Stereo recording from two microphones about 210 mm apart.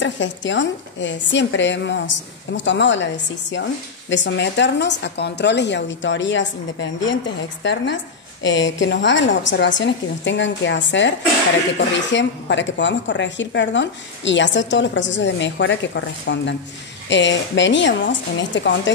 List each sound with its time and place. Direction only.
0.0 s a woman's voice: 60° left (ahead or behind)